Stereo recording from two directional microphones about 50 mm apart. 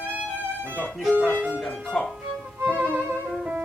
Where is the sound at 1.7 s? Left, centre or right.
Centre.